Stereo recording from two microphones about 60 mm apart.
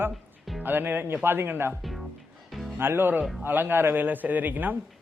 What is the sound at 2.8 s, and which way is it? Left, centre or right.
A man's voice, right.